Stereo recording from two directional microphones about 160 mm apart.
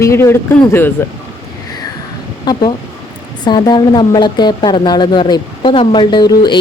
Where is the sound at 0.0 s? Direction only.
15° left (ahead or behind).